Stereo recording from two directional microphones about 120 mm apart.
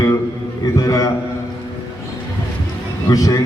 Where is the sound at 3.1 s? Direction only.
30° left (ahead or behind).